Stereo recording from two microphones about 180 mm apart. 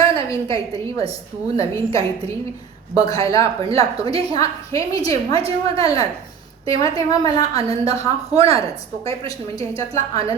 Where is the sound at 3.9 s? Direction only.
35° right (ahead or behind).